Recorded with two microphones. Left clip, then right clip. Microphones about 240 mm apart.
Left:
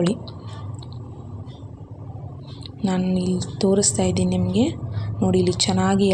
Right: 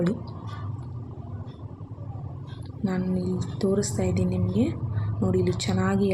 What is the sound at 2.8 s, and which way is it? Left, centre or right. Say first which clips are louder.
A woman's voice: left 5 dB; centre.